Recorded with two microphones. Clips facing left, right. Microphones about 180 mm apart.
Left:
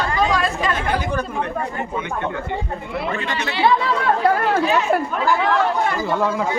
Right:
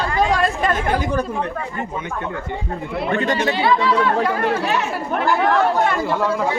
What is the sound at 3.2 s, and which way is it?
Speech, 45° right (ahead or behind).